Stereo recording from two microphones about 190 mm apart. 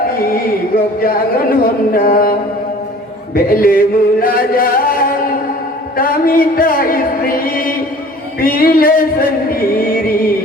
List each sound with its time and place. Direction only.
0.1 s music: 50° left (ahead or behind)
1.0 s chant: 50° left (ahead or behind)
3.3 s chant: 50° left (ahead or behind)